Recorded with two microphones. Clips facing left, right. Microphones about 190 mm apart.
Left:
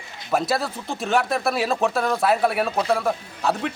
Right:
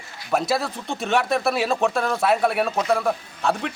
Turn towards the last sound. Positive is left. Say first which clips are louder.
# even
turn(degrees=0)  # may be behind; listen again after turning